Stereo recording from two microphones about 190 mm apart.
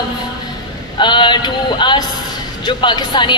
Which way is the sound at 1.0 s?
25° left (ahead or behind).